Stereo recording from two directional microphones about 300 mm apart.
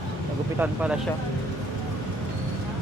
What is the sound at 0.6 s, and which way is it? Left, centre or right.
Speech, centre.